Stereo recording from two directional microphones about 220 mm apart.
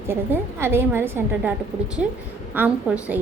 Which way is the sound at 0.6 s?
10° right (ahead or behind).